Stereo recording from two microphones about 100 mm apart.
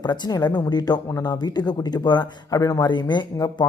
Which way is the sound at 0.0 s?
40° left (ahead or behind).